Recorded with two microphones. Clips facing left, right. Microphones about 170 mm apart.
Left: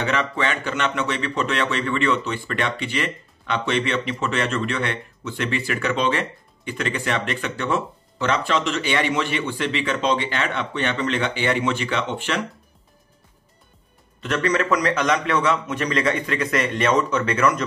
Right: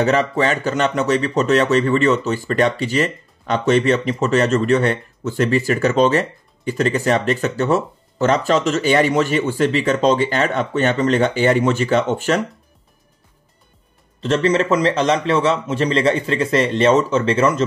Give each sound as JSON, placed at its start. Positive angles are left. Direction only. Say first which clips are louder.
{"t": 0.0, "sound": "speech", "louder": "right 7 dB", "side_deg": -40}
{"t": 14.2, "sound": "a man's voice", "louder": "right 5 dB", "side_deg": -30}